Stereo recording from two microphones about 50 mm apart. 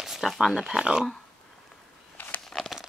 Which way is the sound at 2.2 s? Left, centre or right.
Left.